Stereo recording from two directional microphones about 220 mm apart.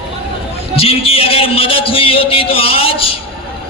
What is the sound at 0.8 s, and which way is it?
A man's voice, 25° left (ahead or behind).